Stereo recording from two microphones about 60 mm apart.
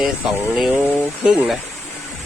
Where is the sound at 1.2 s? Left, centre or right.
Centre.